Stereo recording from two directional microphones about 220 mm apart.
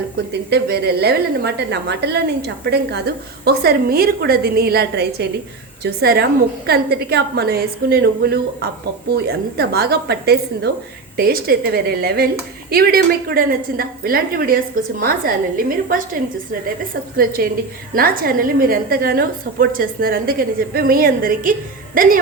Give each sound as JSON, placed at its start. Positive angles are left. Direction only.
{"t": 0.5, "sound": "a woman's voice", "side_deg": -45}
{"t": 17.2, "sound": "a woman's voice", "side_deg": -40}